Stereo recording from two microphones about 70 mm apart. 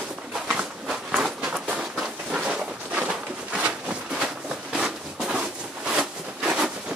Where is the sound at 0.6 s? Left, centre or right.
Centre.